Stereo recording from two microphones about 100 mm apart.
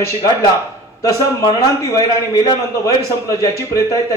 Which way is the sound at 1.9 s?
35° left (ahead or behind).